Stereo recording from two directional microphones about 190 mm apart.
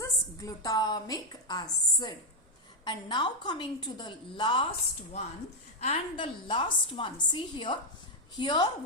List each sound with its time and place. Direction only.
0.0 s a woman's voice: 20° left (ahead or behind)
5.8 s a woman's voice: 30° left (ahead or behind)